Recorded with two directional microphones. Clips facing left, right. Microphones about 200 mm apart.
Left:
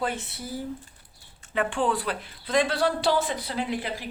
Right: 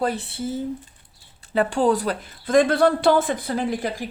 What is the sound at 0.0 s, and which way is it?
Speech, 35° right (ahead or behind).